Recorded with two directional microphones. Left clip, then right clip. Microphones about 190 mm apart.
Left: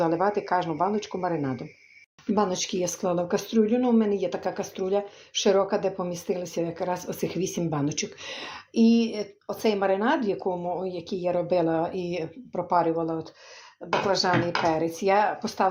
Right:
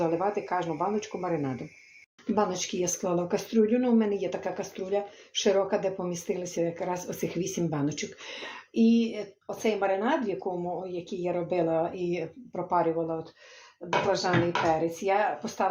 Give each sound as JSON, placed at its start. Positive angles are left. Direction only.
{"t": 0.0, "sound": "speech", "side_deg": 35}
{"t": 8.7, "sound": "speech", "side_deg": 45}